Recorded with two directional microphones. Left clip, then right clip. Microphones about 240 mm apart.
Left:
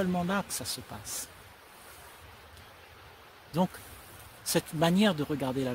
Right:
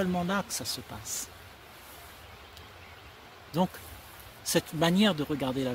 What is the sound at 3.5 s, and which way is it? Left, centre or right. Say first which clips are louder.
Speech: right 1 dB; centre.